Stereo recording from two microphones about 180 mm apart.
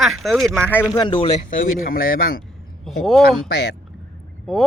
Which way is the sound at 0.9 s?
25° left (ahead or behind).